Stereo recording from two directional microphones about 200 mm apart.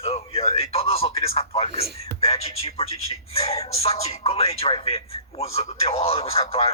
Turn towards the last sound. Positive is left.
turn(degrees=30)  # may be behind; listen again after turning